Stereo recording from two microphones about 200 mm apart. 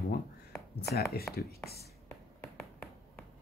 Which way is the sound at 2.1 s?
Centre (ahead or behind).